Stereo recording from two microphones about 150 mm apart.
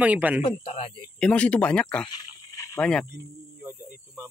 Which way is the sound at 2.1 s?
25° left (ahead or behind).